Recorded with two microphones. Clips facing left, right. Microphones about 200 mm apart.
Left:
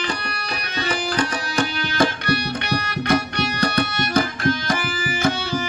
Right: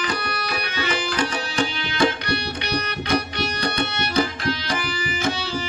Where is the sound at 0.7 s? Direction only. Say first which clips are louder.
Left 3 dB; 35° left (ahead or behind); by 3.8 s 50° left (ahead or behind).